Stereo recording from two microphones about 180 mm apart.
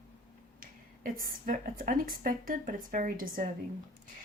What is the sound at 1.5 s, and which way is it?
Speech, 50° right (ahead or behind).